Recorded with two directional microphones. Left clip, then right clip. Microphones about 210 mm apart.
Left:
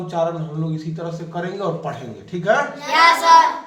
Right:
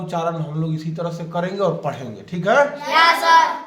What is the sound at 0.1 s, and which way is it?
A man's voice, 45° right (ahead or behind).